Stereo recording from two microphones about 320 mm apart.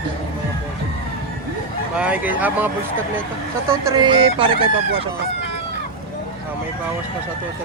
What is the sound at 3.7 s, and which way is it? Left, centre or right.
Fowl, centre.